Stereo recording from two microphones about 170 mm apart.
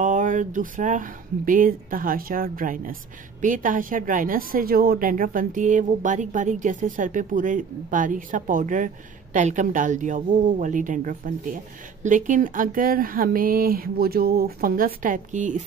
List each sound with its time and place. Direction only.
0.0 s speech: 50° right (ahead or behind)